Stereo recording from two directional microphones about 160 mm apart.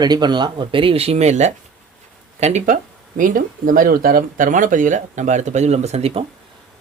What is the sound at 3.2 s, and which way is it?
Speech, 55° right (ahead or behind).